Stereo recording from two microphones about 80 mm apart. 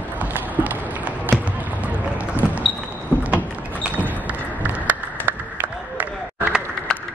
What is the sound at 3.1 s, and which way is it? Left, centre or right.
Vehicle, left.